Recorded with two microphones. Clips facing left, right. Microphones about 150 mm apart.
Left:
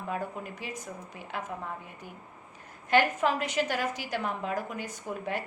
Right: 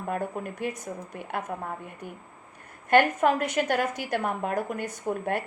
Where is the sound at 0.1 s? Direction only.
55° right (ahead or behind).